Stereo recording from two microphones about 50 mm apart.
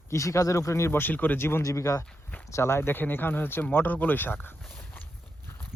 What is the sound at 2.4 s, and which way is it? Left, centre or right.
Speech, left.